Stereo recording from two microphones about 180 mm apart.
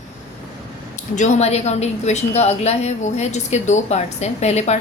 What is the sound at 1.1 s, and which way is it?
A woman's voice, 40° left (ahead or behind).